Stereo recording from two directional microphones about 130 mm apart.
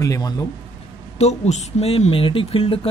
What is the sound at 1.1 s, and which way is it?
Speech, 55° left (ahead or behind).